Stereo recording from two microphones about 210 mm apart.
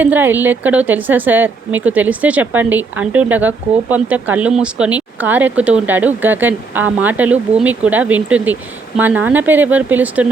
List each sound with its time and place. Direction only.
0.0 s a woman's voice: 10° right (ahead or behind)